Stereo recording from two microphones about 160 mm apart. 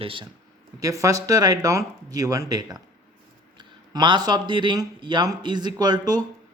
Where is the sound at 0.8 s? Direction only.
20° right (ahead or behind).